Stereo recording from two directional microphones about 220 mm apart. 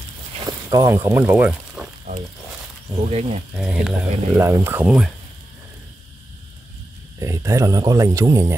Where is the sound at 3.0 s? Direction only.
30° right (ahead or behind).